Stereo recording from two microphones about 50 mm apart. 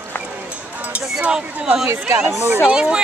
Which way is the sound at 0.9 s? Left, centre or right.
Right.